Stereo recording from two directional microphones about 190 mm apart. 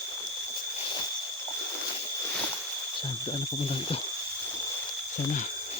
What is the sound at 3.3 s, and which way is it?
Speech, 30° left (ahead or behind).